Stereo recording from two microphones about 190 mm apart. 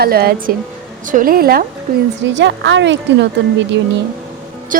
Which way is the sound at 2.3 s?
70° right (ahead or behind).